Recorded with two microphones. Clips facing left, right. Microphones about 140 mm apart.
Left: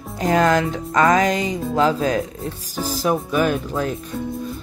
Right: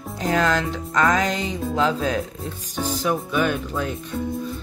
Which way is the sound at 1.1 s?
45° left (ahead or behind).